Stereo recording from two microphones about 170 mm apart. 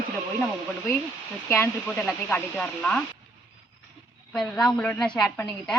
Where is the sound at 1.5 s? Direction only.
15° left (ahead or behind).